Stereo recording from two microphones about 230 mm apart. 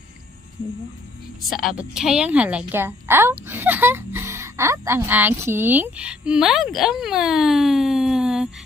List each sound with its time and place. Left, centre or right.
1.6 s speech: centre